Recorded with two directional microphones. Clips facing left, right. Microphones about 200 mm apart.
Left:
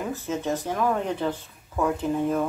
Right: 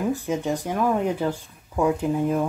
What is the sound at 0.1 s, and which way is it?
Speech, 15° right (ahead or behind).